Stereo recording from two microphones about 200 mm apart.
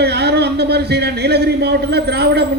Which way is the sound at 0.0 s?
55° right (ahead or behind).